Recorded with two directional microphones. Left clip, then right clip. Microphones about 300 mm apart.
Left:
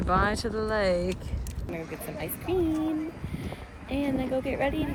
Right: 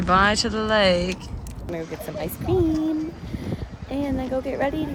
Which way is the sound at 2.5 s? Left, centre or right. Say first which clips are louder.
Right 6 dB; centre.